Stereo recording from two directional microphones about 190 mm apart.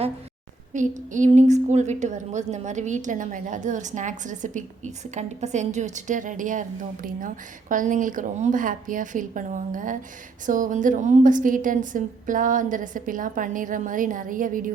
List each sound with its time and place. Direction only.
0.7 s a woman's voice: 40° right (ahead or behind)